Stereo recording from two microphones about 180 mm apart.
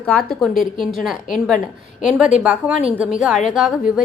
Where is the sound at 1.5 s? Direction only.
45° left (ahead or behind).